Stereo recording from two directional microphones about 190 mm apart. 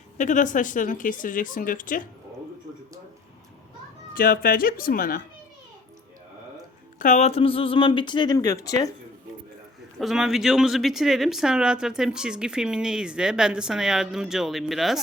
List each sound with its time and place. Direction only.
0.2 s speech: 40° left (ahead or behind)
4.1 s speech: 50° left (ahead or behind)
7.0 s speech: 40° left (ahead or behind); by 8.9 s 20° left (ahead or behind)
10.0 s speech: centre (ahead or behind)